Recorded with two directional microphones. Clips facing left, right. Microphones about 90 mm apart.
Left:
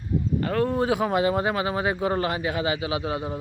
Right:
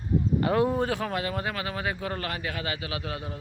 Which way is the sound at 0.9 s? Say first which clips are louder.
Left 7 dB; 15° left (ahead or behind).